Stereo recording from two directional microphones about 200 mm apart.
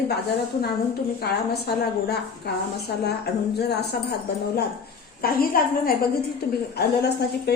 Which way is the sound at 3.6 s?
55° left (ahead or behind).